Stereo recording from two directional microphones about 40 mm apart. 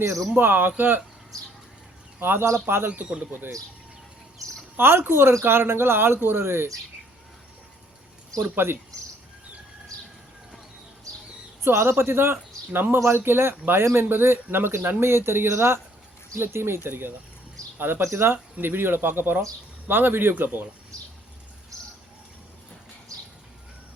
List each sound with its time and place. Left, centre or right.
0.3 s speech: right
2.2 s speech: right
2.9 s speech: right
4.8 s speech: right
8.5 s speech: right
11.6 s speech: right
15.0 s speech: right
17.7 s speech: right
18.6 s speech: right